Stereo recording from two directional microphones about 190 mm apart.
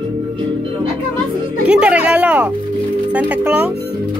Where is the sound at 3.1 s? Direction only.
10° right (ahead or behind).